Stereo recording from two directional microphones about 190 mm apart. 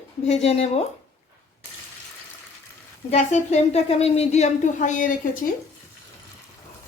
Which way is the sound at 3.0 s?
35° left (ahead or behind).